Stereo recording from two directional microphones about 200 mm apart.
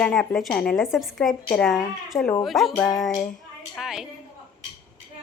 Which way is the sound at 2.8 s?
20° left (ahead or behind).